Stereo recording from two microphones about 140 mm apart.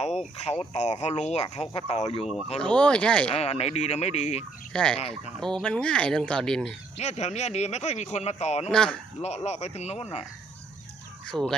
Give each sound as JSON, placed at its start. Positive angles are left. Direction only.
{"t": 0.6, "sound": "a man's voice", "side_deg": 50}
{"t": 2.6, "sound": "speech", "side_deg": 10}
{"t": 3.3, "sound": "a man's voice", "side_deg": 50}
{"t": 4.7, "sound": "speech", "side_deg": 5}
{"t": 4.9, "sound": "a man's voice", "side_deg": 50}
{"t": 5.4, "sound": "speech", "side_deg": 5}
{"t": 7.0, "sound": "a man's voice", "side_deg": 55}
{"t": 8.7, "sound": "speech", "side_deg": 5}
{"t": 9.2, "sound": "a man's voice", "side_deg": 50}
{"t": 11.3, "sound": "speech", "side_deg": 5}